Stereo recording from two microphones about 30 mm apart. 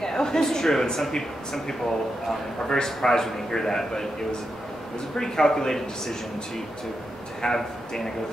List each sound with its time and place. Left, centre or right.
0.0 s a woman's voice: centre
5.1 s speech: left
7.4 s a man's voice: centre